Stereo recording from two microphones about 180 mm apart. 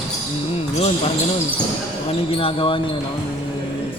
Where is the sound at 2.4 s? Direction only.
30° left (ahead or behind).